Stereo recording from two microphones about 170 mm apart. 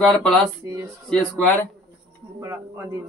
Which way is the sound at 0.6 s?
15° right (ahead or behind).